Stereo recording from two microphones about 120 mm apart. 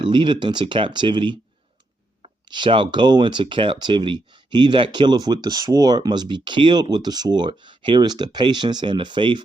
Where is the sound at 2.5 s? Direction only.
45° right (ahead or behind).